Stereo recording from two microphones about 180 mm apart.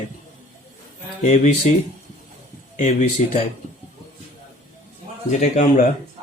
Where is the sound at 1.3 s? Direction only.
40° left (ahead or behind).